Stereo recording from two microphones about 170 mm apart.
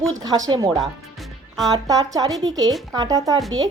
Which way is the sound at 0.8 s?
Centre (ahead or behind).